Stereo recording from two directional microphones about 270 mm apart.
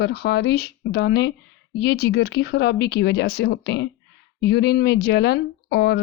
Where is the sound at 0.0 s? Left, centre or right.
Left.